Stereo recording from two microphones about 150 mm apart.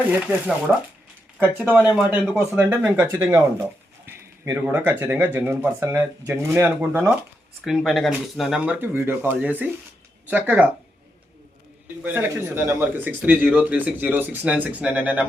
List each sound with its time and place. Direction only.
0.1 s speech: 10° right (ahead or behind)
7.6 s speech: centre (ahead or behind)
12.0 s speech: 15° right (ahead or behind)